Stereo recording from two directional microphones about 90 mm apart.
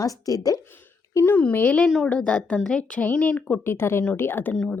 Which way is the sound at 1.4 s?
15° left (ahead or behind).